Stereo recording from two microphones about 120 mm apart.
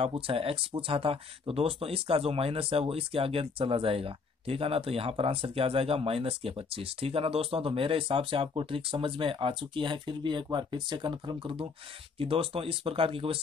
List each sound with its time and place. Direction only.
0.0 s speech: 50° right (ahead or behind)